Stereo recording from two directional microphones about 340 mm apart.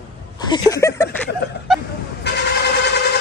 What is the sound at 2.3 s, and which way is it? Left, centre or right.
Vehicle, left.